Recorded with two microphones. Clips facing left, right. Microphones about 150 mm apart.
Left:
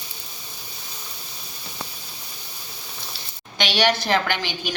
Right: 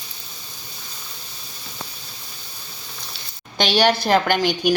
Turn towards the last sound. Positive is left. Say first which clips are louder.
# right 8 dB
turn(degrees=-50)  # may be behind; listen again after turning